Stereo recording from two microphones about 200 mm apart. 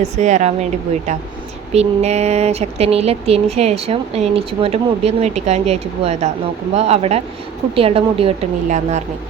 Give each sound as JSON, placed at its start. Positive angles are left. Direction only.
{"t": 0.0, "sound": "a woman's voice", "side_deg": -35}